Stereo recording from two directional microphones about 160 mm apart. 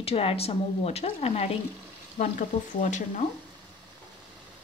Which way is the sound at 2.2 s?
50° left (ahead or behind).